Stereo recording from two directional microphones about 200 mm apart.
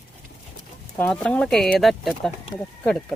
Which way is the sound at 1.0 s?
5° left (ahead or behind).